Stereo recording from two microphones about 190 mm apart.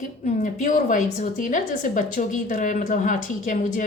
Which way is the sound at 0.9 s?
45° left (ahead or behind).